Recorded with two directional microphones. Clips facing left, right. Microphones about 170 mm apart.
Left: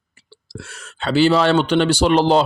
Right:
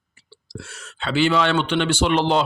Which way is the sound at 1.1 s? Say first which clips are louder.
Left 4 dB; 35° left (ahead or behind).